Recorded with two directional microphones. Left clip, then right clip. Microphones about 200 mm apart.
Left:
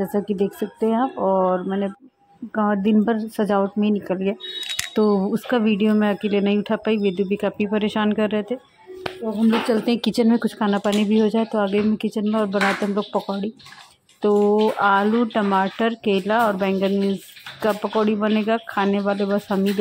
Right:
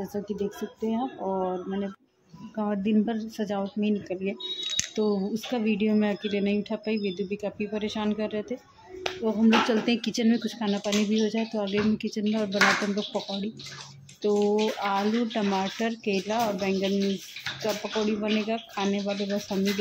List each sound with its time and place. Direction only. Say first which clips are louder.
0.1 s speech: left 9 dB; 25° left (ahead or behind)
10.2 s speech: left 7 dB; 15° left (ahead or behind)